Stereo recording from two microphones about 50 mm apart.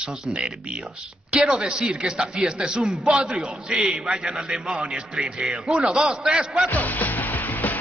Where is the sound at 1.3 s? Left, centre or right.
Centre.